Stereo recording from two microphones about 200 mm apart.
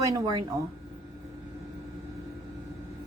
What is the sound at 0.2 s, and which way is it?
Speech, 15° right (ahead or behind).